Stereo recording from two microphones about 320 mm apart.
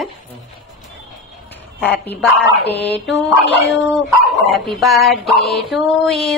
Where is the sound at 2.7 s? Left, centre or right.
Left.